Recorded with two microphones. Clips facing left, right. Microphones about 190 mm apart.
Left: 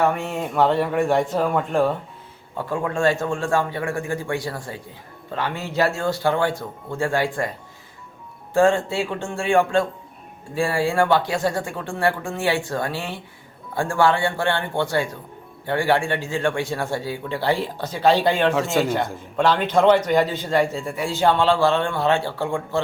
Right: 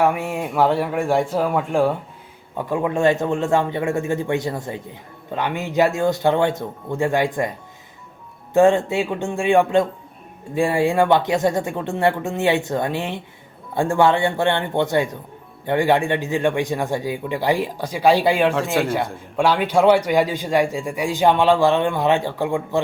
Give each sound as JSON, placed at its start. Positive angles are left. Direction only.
{"t": 0.0, "sound": "a man's voice", "side_deg": -10}
{"t": 8.5, "sound": "a man's voice", "side_deg": -20}